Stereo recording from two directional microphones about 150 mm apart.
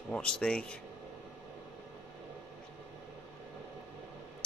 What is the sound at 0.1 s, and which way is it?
Speech, 5° left (ahead or behind).